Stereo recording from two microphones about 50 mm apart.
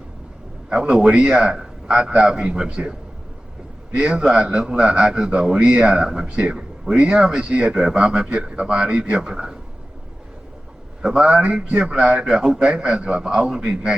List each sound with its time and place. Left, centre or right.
0.7 s a man's voice: centre
3.9 s a man's voice: centre
11.0 s a man's voice: centre